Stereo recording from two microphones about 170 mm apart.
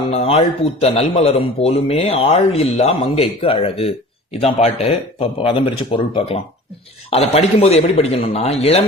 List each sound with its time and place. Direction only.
0.0 s speech: 35° left (ahead or behind)